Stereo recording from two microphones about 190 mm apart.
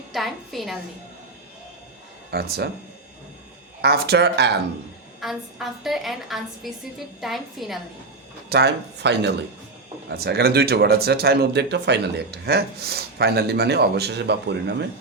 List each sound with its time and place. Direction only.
0.1 s a woman's voice: centre (ahead or behind)
2.3 s speech: 55° right (ahead or behind)
3.8 s speech: 55° right (ahead or behind)
5.2 s a woman's voice: centre (ahead or behind)
8.4 s speech: 60° right (ahead or behind)